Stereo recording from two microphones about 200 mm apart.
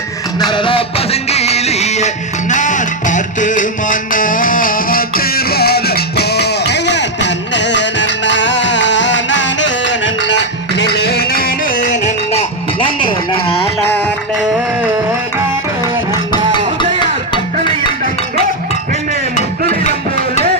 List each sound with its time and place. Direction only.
0.5 s music: 25° left (ahead or behind)